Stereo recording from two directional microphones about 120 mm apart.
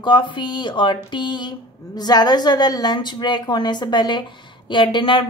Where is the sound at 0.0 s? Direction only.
40° left (ahead or behind).